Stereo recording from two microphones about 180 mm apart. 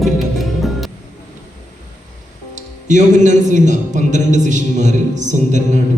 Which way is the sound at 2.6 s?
45° right (ahead or behind).